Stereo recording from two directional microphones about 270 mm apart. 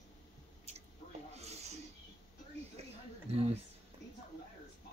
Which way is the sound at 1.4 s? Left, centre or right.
Right.